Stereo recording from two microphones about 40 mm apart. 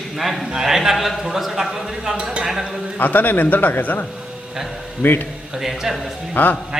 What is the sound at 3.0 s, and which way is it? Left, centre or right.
Speech, left.